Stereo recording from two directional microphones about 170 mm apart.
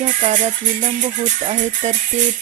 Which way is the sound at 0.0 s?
45° right (ahead or behind).